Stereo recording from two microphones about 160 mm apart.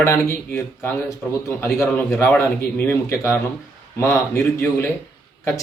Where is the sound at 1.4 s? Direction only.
15° left (ahead or behind).